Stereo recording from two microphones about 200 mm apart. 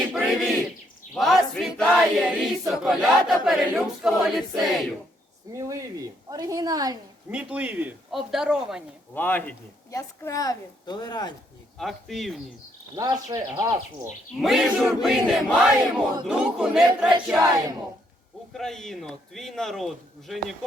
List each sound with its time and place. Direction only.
0.1 s bird: centre (ahead or behind)
1.1 s choir: centre (ahead or behind)
5.5 s speech: 15° right (ahead or behind)
7.3 s a man's voice: 5° right (ahead or behind)
9.1 s a woman's voice: 10° left (ahead or behind)
11.8 s a man's voice: centre (ahead or behind)
13.0 s speech: 20° right (ahead or behind)
14.4 s a man's voice: centre (ahead or behind)
18.5 s a man's voice: centre (ahead or behind)